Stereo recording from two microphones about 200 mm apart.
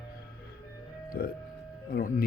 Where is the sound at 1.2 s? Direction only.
50° left (ahead or behind).